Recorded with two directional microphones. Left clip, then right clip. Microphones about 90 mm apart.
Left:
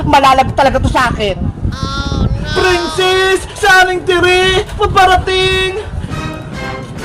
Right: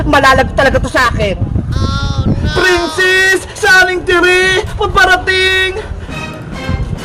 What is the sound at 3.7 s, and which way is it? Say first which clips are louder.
Speech: right 1 dB; 35° right (ahead or behind).